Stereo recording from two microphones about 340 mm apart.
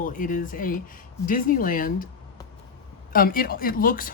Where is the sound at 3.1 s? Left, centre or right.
Left.